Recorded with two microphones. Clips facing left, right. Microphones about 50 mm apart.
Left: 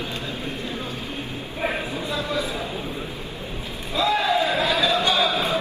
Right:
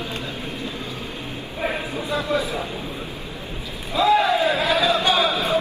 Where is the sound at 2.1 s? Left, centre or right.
Right.